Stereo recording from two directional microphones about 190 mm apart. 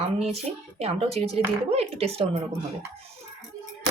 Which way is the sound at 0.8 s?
30° right (ahead or behind).